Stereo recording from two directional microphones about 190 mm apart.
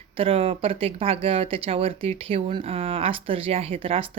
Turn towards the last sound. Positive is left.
turn(degrees=-30)  # may be behind; listen again after turning